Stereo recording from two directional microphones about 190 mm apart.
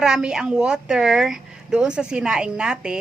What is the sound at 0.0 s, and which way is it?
A woman's voice, 5° right (ahead or behind).